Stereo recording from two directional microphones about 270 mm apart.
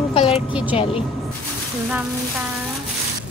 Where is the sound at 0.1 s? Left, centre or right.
Left.